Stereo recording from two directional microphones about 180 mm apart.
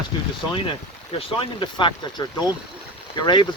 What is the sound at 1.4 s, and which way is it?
Speech, 30° left (ahead or behind).